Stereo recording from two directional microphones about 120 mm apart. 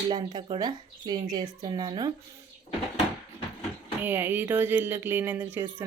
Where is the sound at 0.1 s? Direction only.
40° right (ahead or behind).